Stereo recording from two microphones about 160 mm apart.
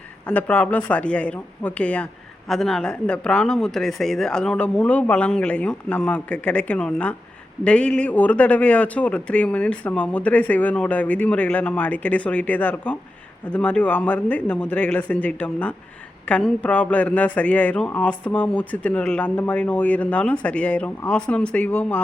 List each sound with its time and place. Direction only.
0.3 s speech: 10° left (ahead or behind)